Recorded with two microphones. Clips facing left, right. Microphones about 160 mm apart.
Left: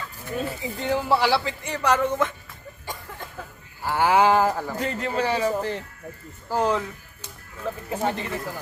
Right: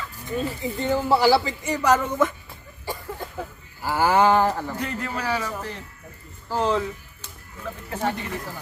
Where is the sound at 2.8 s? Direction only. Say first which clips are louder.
Right 6 dB; 10° right (ahead or behind).